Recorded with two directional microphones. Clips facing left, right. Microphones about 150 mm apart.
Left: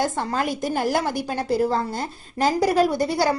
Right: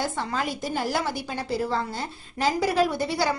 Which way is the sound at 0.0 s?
50° left (ahead or behind).